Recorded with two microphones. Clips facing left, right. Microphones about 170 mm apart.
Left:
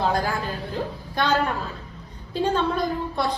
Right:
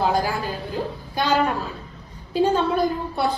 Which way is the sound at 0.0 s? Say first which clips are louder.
Right 2 dB; 10° right (ahead or behind).